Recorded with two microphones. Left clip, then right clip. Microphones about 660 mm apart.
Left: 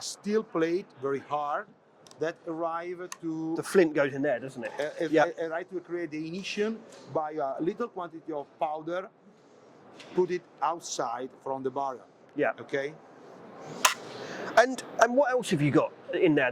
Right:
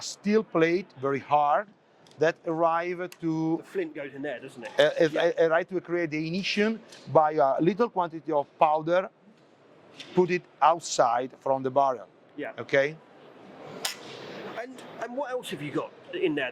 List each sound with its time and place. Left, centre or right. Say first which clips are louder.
0.0 s a man's voice: right 3 dB; centre
3.6 s speech: left 9 dB; left
4.8 s a man's voice: right 4 dB; right
10.2 s a man's voice: right 4 dB; right
14.6 s a woman's voice: left 19 dB; left
15.2 s speech: left 7 dB; left